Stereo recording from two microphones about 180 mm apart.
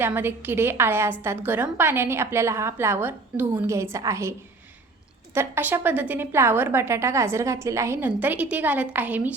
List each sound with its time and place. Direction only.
0.0 s a woman's voice: 10° right (ahead or behind)